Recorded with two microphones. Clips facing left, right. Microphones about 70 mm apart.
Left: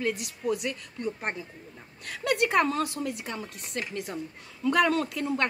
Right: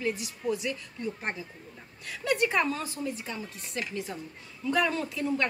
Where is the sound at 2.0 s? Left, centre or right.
Left.